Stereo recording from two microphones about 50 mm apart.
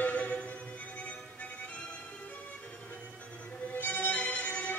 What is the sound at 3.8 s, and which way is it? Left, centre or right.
Music, left.